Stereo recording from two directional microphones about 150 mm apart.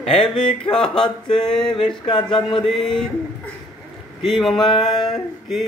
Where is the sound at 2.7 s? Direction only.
5° left (ahead or behind).